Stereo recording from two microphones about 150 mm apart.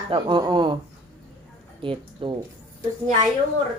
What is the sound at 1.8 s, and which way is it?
Speech, 35° right (ahead or behind).